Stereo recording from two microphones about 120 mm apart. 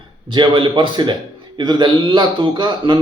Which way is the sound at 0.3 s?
45° right (ahead or behind).